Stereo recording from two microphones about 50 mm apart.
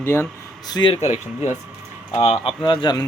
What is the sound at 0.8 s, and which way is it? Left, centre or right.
Speech, left.